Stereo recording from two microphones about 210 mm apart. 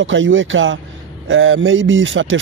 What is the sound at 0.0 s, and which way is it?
Speech, 65° right (ahead or behind).